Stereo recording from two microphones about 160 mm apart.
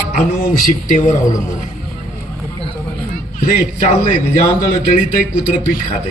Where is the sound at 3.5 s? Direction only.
50° left (ahead or behind).